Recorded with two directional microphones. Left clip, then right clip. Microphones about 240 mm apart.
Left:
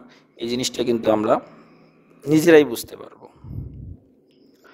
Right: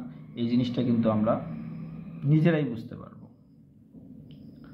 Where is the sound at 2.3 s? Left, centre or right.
Left.